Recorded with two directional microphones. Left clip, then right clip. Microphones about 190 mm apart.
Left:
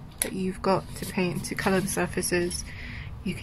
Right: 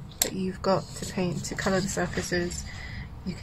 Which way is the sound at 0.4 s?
10° left (ahead or behind).